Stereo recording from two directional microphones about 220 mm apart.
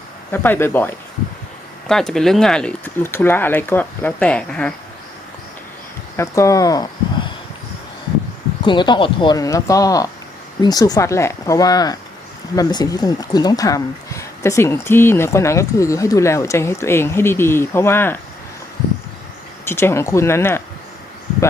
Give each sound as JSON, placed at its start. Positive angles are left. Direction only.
{"t": 0.3, "sound": "speech", "side_deg": 10}
{"t": 6.1, "sound": "speech", "side_deg": 15}
{"t": 8.6, "sound": "speech", "side_deg": 20}
{"t": 19.6, "sound": "speech", "side_deg": 10}